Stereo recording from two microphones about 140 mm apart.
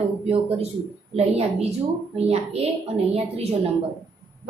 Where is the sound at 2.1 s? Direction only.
45° right (ahead or behind).